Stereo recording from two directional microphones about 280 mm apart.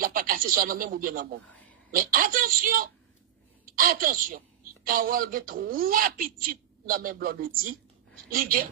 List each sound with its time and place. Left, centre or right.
0.0 s a woman's voice: right